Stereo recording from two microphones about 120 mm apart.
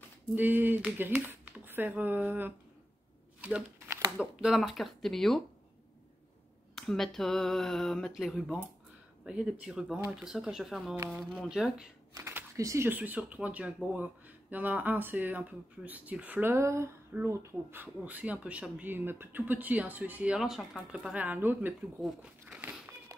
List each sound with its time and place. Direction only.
0.3 s speech: 15° right (ahead or behind)
3.3 s a sound: 10° right (ahead or behind)
4.2 s speech: 5° right (ahead or behind)
6.7 s speech: centre (ahead or behind)
12.1 s speech: 20° right (ahead or behind)
22.2 s a sound: 10° right (ahead or behind)